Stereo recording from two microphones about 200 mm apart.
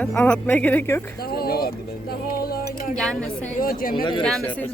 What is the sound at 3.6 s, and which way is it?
Speech, 45° left (ahead or behind).